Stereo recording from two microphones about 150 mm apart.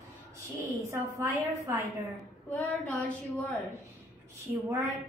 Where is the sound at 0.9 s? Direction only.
20° right (ahead or behind).